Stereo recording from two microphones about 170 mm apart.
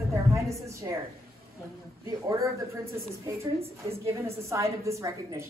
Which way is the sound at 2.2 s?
20° right (ahead or behind).